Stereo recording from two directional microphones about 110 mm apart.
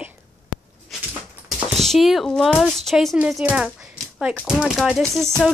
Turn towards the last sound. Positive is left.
turn(degrees=5)  # may be behind; listen again after turning